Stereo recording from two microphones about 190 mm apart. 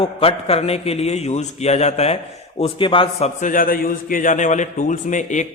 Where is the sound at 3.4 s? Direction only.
45° left (ahead or behind).